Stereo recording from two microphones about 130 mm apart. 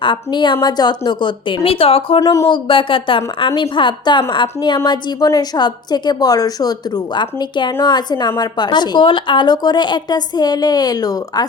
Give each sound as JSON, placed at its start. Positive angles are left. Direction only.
{"t": 0.0, "sound": "a woman's voice", "side_deg": 35}
{"t": 2.2, "sound": "speech", "side_deg": 25}
{"t": 2.5, "sound": "a woman's voice", "side_deg": 40}